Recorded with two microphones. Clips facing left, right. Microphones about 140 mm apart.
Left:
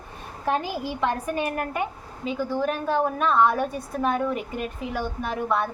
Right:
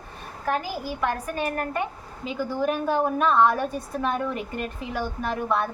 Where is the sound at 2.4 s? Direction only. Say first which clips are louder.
Right 1 dB; 5° right (ahead or behind).